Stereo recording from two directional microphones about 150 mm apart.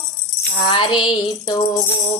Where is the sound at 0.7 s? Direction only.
35° left (ahead or behind).